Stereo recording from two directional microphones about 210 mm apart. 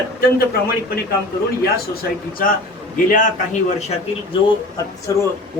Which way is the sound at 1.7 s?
45° left (ahead or behind).